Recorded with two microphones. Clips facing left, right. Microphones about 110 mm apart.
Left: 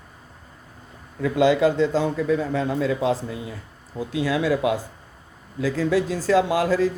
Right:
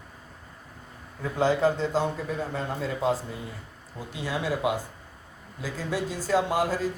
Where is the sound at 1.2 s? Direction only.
85° left.